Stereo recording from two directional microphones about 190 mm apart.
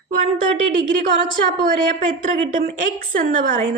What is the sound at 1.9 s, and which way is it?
A woman's voice, 45° right (ahead or behind).